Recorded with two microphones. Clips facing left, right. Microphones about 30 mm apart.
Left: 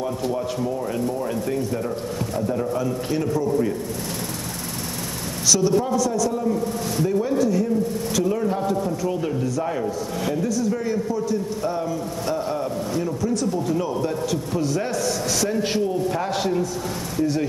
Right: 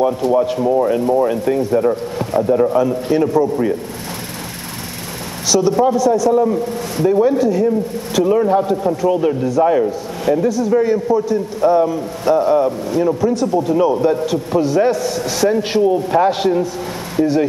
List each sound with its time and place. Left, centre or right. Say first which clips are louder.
0.0 s a man's voice: right 10 dB; right
5.5 s a man's voice: right 6 dB; right
6.4 s a man's voice: right 6 dB; right